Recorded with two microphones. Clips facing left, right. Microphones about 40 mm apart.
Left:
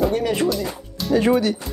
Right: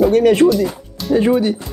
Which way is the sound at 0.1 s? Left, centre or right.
Right.